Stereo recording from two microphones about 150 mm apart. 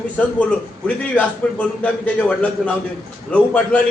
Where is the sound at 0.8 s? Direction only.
10° left (ahead or behind).